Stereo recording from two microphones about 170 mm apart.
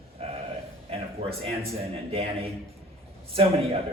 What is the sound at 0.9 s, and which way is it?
A man's voice, 35° right (ahead or behind).